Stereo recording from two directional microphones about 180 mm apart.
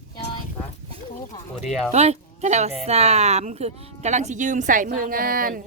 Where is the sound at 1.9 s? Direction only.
35° right (ahead or behind).